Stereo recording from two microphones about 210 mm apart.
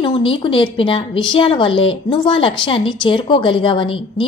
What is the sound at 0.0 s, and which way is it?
A woman's voice, 25° left (ahead or behind).